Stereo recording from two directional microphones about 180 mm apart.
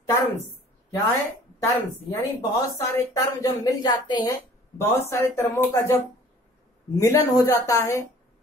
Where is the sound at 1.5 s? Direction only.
15° left (ahead or behind).